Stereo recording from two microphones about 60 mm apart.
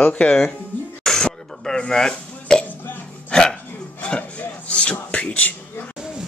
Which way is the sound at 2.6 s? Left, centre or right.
Left.